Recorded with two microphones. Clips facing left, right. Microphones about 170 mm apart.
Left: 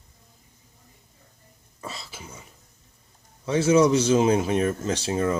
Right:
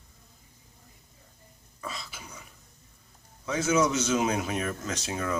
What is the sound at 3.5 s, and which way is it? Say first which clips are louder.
Speech: left 7 dB; 30° left (ahead or behind).